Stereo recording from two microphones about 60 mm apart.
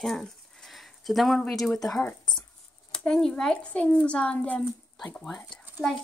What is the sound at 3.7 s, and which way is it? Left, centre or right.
Speech, left.